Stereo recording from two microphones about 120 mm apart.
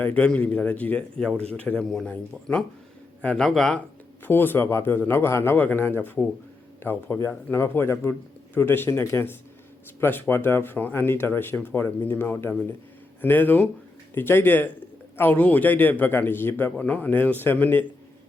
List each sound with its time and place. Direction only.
0.0 s a man's voice: 10° left (ahead or behind)
4.3 s a man's voice: 20° left (ahead or behind)